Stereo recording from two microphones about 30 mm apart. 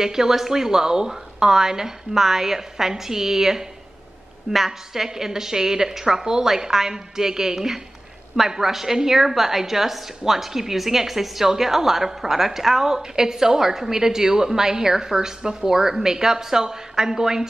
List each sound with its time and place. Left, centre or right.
0.0 s a woman's voice: centre